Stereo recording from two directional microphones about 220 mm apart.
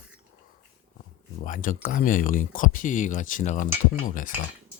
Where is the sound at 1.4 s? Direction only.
35° left (ahead or behind).